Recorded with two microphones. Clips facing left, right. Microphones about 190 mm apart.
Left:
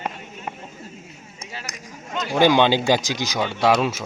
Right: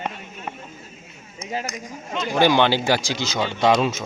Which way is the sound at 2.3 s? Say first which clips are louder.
Left 1 dB; 15° left (ahead or behind).